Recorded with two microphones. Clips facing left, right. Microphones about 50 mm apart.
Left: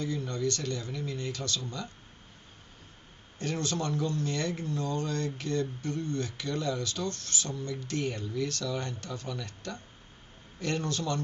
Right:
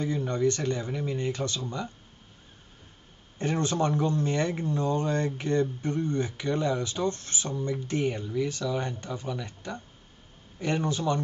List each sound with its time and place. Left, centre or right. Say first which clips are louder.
0.0 s speech: right 5 dB; right
3.3 s a man's voice: right 5 dB; right